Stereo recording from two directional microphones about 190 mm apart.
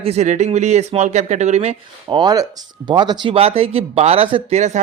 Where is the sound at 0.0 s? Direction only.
35° right (ahead or behind).